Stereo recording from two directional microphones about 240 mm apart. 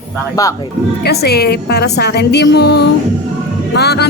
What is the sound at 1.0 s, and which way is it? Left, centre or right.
A woman's voice, left.